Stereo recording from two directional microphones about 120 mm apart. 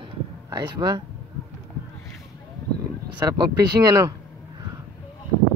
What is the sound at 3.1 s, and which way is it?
Speech, 35° right (ahead or behind).